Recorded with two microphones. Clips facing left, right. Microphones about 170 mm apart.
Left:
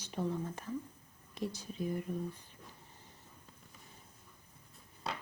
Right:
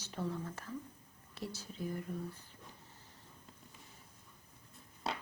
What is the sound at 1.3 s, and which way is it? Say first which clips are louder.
Speech: left 5 dB; 15° left (ahead or behind).